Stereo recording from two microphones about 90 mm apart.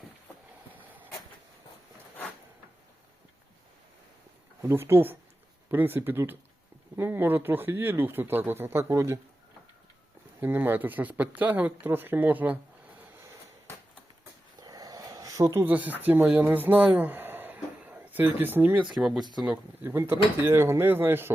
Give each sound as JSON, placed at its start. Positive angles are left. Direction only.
{"t": 0.7, "sound": "vehicle", "side_deg": -20}
{"t": 4.7, "sound": "speech", "side_deg": -25}
{"t": 10.4, "sound": "speech", "side_deg": -25}
{"t": 14.6, "sound": "a sound", "side_deg": -45}
{"t": 15.6, "sound": "speech", "side_deg": -20}
{"t": 16.5, "sound": "a sound", "side_deg": -20}
{"t": 18.9, "sound": "speech", "side_deg": -5}
{"t": 19.5, "sound": "speech", "side_deg": -25}